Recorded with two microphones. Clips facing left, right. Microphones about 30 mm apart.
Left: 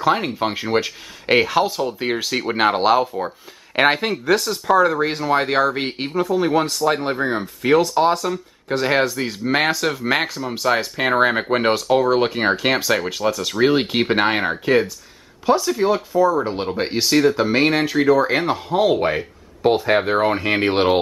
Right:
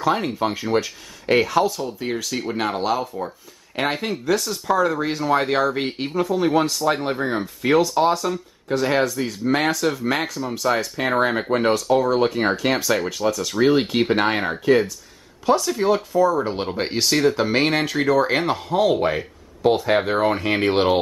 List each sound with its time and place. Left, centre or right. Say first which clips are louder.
0.0 s speech: left 2 dB; centre
6.1 s speech: left 1 dB; centre
8.6 s speech: left 1 dB; left